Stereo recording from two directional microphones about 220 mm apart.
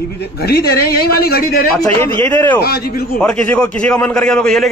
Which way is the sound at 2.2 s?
10° left (ahead or behind).